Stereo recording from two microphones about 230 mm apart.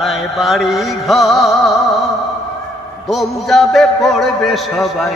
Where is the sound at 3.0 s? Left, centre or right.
Centre.